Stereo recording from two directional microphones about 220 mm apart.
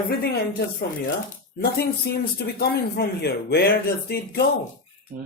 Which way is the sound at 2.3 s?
45° left (ahead or behind).